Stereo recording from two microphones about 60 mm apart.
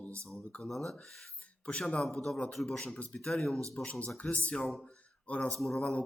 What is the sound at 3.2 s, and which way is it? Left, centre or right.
Speech, centre.